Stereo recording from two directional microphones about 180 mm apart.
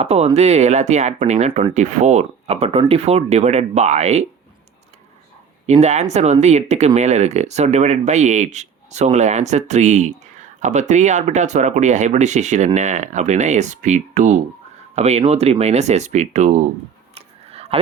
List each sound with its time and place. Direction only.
0.0 s speech: 35° right (ahead or behind)
5.6 s speech: 40° right (ahead or behind)
17.2 s a sound: 35° right (ahead or behind)